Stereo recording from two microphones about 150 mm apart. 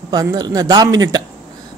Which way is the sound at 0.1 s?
25° right (ahead or behind).